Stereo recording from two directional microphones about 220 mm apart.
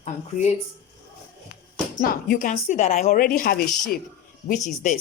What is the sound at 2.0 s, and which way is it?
Speech, 40° left (ahead or behind).